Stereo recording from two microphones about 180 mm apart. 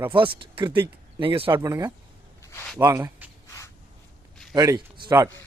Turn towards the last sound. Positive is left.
turn(degrees=-20)  # may be behind; listen again after turning